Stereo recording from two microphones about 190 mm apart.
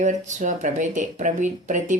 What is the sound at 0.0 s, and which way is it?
Speech, 40° right (ahead or behind).